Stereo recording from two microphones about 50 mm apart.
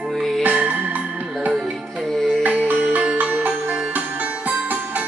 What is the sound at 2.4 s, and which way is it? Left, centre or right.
Music, right.